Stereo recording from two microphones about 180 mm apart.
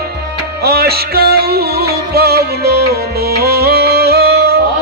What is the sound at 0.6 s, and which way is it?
Music, 60° right (ahead or behind).